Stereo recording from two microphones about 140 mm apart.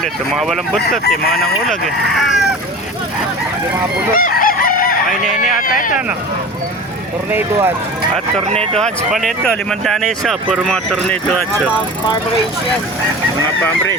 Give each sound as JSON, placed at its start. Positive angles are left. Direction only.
{"t": 0.0, "sound": "speech", "side_deg": 0}
{"t": 4.1, "sound": "chicken", "side_deg": 85}
{"t": 5.6, "sound": "speech", "side_deg": 80}
{"t": 7.3, "sound": "speech", "side_deg": -15}
{"t": 8.8, "sound": "speech", "side_deg": 0}